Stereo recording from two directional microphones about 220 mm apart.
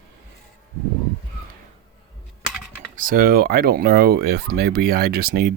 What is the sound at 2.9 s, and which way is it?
Speech, 40° right (ahead or behind).